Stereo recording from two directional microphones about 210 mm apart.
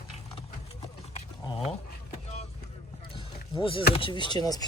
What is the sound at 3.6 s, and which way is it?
Speech, 25° left (ahead or behind).